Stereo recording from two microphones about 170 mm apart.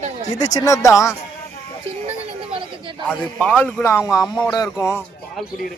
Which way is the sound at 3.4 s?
10° left (ahead or behind).